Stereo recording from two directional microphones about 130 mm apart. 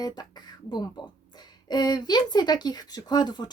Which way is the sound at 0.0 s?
30° left (ahead or behind).